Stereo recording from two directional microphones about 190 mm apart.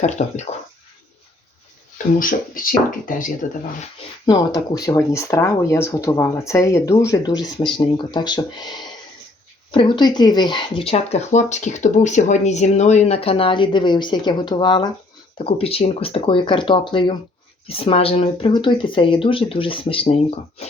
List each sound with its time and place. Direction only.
0.0 s speech: 40° left (ahead or behind)
2.1 s speech: 45° left (ahead or behind)
4.3 s speech: 20° left (ahead or behind)